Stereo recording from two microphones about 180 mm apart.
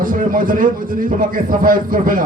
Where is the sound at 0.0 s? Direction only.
50° right (ahead or behind).